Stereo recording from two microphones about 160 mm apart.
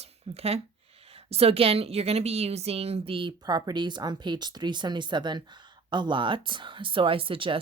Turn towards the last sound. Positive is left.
turn(degrees=-35)  # may be behind; listen again after turning